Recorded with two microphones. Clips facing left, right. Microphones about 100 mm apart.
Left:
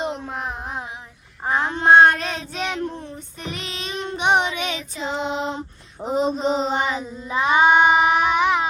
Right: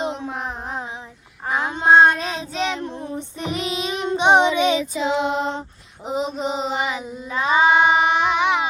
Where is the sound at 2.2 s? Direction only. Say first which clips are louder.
Right 1 dB; 15° right (ahead or behind).